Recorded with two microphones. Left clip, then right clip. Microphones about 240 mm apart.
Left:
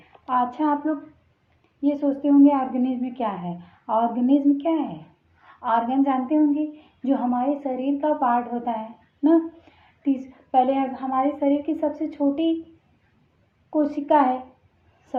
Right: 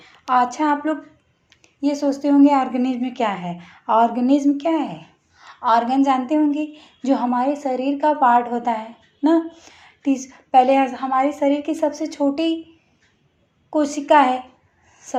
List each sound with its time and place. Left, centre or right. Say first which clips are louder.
0.3 s a woman's voice: right 5 dB; right
13.7 s a woman's voice: right 4 dB; right